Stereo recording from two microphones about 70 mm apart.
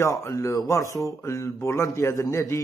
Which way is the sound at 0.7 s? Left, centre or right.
Left.